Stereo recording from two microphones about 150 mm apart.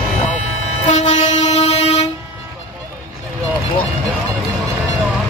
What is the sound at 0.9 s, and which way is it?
Train, 50° left (ahead or behind).